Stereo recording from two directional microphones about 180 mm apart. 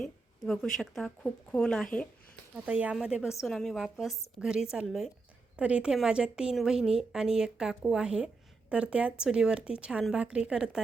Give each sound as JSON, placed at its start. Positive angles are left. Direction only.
{"t": 0.0, "sound": "a woman's voice", "side_deg": 0}
{"t": 2.6, "sound": "a woman's voice", "side_deg": -5}